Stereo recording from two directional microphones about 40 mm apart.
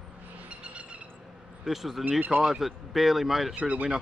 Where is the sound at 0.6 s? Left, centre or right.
Right.